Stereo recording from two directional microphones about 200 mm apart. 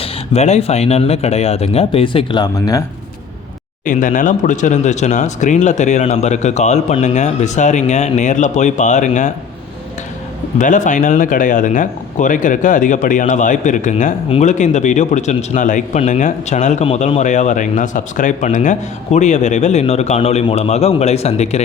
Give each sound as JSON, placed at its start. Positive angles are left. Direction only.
{"t": 0.0, "sound": "speech", "side_deg": 35}
{"t": 3.8, "sound": "speech", "side_deg": 40}
{"t": 10.6, "sound": "speech", "side_deg": 40}